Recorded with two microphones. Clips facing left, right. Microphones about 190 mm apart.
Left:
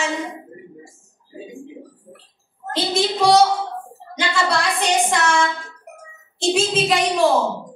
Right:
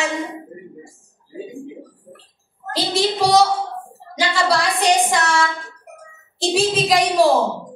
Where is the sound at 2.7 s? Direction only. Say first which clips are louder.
Right 1 dB; 35° right (ahead or behind).